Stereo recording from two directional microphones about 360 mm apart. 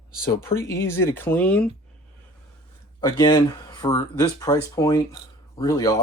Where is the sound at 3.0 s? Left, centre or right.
Centre.